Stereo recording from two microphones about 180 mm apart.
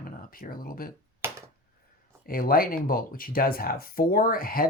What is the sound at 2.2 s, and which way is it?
Speech, 55° left (ahead or behind).